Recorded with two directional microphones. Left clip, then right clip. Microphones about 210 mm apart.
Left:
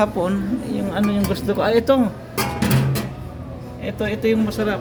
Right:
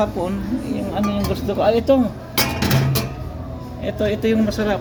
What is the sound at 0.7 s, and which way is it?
Speech, 20° left (ahead or behind).